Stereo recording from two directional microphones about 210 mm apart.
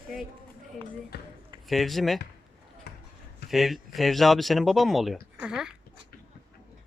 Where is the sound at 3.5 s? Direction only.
Centre (ahead or behind).